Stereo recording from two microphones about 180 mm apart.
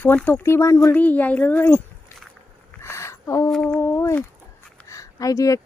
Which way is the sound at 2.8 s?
15° left (ahead or behind).